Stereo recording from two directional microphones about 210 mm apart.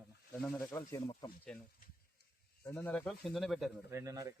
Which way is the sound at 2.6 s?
10° left (ahead or behind).